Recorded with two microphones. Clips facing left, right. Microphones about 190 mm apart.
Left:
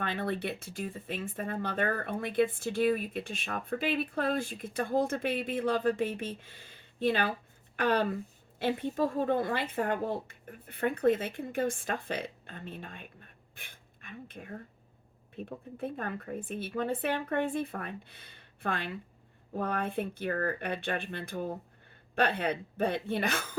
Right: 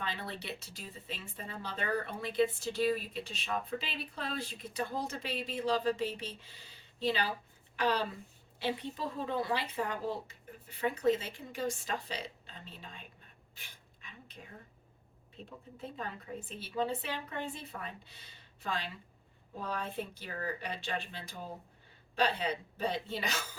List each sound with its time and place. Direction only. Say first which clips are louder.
0.0 s a woman's voice: left 8 dB; 55° left (ahead or behind)
13.6 s pant: left 4 dB; 55° left (ahead or behind)
15.4 s a woman's voice: left 8 dB; 55° left (ahead or behind)